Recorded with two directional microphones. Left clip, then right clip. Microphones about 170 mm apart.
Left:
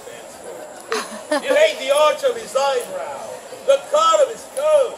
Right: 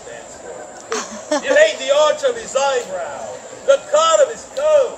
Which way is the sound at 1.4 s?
15° left (ahead or behind).